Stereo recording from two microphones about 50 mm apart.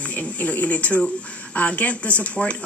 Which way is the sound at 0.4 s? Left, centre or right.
Left.